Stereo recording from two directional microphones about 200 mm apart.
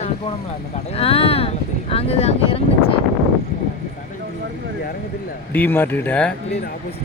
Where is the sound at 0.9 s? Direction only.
30° left (ahead or behind).